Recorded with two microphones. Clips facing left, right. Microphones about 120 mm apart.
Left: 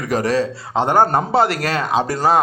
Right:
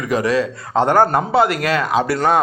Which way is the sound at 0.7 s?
20° left (ahead or behind).